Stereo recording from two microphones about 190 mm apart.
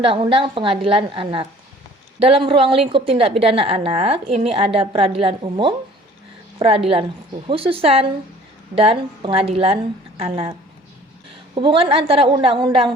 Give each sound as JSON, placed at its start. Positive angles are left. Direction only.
{"t": 0.0, "sound": "a woman's voice", "side_deg": -30}
{"t": 11.5, "sound": "a woman's voice", "side_deg": -25}